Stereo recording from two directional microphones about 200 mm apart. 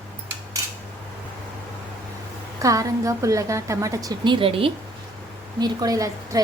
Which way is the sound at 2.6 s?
15° right (ahead or behind).